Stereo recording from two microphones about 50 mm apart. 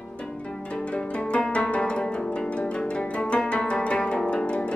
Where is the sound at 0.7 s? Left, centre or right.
Left.